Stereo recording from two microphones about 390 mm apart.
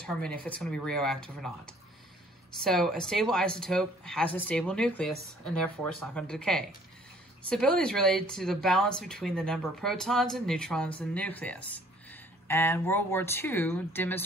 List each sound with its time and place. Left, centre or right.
0.0 s speech: centre